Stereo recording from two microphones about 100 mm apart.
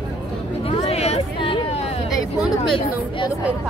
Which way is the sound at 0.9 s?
90° left.